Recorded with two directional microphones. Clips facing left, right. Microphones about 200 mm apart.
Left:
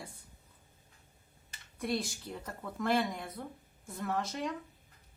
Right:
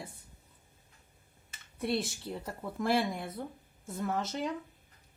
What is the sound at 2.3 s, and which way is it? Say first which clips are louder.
Speech: right 3 dB; 30° right (ahead or behind).